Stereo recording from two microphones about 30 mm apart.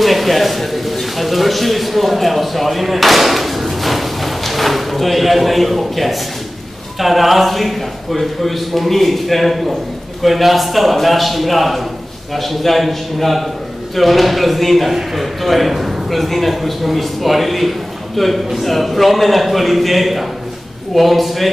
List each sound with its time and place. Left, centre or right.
0.0 s a man's voice: centre